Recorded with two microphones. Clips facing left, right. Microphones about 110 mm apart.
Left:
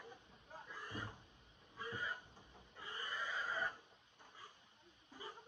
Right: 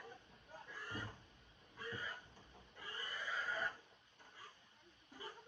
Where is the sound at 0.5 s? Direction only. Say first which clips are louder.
Even; 20° left (ahead or behind).